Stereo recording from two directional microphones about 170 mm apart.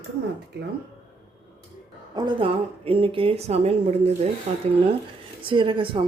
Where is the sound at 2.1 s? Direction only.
25° right (ahead or behind).